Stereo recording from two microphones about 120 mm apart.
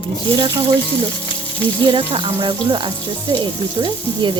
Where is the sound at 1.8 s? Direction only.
45° right (ahead or behind).